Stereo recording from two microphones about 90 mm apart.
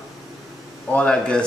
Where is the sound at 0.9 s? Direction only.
10° left (ahead or behind).